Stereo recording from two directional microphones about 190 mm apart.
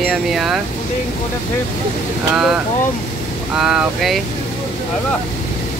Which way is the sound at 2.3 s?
5° right (ahead or behind).